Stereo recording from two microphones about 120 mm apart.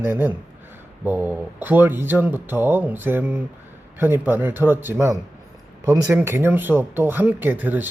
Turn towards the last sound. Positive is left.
turn(degrees=-15)  # may be behind; listen again after turning